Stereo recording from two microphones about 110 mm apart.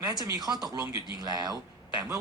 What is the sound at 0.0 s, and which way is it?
A man's voice, 35° right (ahead or behind).